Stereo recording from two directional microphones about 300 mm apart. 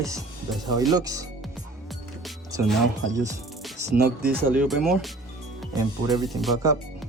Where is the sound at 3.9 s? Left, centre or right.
Right.